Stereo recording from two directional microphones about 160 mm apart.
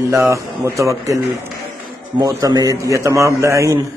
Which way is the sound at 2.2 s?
20° right (ahead or behind).